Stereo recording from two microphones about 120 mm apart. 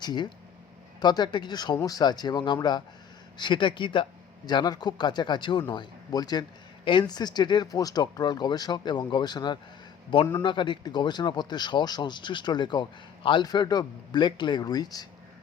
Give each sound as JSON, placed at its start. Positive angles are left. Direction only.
{"t": 0.0, "sound": "speech", "side_deg": 40}